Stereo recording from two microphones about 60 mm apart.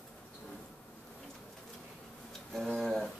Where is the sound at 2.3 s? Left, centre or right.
Centre.